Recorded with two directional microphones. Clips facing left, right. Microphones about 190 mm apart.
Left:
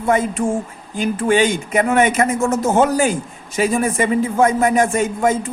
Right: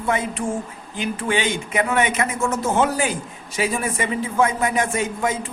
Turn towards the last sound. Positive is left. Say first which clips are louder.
# left 6 dB
turn(degrees=45)  # may be behind; listen again after turning